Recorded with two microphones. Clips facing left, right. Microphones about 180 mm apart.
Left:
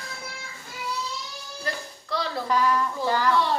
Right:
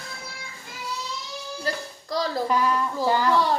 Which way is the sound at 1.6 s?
40° right (ahead or behind).